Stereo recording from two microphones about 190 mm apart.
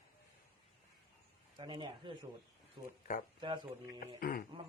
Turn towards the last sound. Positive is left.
turn(degrees=50)  # may be behind; listen again after turning